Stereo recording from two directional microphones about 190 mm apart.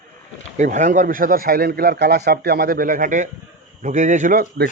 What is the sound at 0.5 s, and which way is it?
A man's voice, 40° right (ahead or behind).